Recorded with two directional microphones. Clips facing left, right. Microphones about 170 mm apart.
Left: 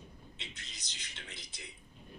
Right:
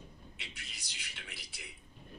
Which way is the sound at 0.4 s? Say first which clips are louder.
Left 1 dB; 20° left (ahead or behind).